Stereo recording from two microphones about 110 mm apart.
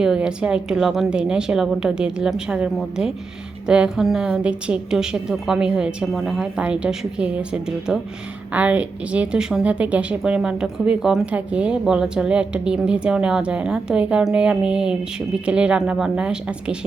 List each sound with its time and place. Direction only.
0.0 s a woman's voice: 5° right (ahead or behind)